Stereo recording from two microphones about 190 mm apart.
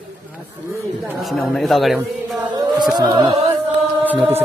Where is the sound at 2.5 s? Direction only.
25° right (ahead or behind).